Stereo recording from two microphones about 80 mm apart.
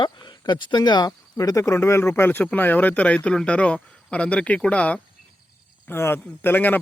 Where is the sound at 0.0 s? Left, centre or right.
Left.